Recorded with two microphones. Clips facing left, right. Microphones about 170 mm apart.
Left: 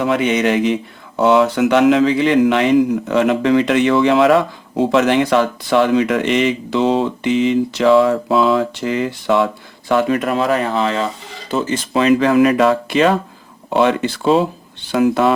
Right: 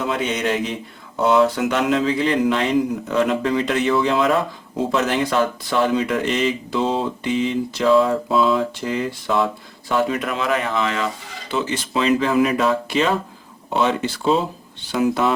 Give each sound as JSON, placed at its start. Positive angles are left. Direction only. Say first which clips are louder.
{"t": 0.1, "sound": "speech", "louder": "left 7 dB", "side_deg": 70}
{"t": 9.9, "sound": "speech", "louder": "left 5 dB", "side_deg": 60}
{"t": 10.2, "sound": "speech", "louder": "left 5 dB", "side_deg": 40}
{"t": 11.5, "sound": "speech", "louder": "left 5 dB", "side_deg": 50}